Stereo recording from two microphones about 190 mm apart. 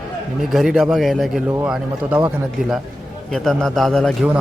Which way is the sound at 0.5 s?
Centre (ahead or behind).